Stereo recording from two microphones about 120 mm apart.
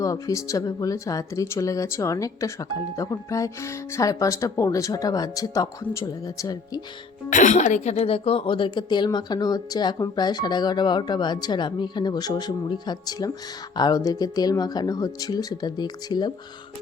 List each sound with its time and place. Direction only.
0.0 s speech: 30° left (ahead or behind)
7.3 s speech: 90° left; by 16.3 s 35° left (ahead or behind)